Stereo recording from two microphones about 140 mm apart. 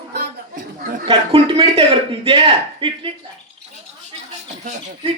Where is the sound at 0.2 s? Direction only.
75° right (ahead or behind).